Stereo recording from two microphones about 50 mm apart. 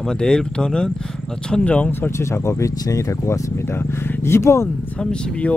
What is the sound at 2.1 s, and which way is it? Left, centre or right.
Speech, left.